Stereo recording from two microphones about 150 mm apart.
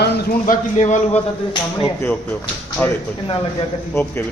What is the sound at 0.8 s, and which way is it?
Speech, 50° left (ahead or behind).